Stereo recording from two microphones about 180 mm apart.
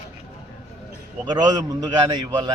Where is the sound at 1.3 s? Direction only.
20° right (ahead or behind).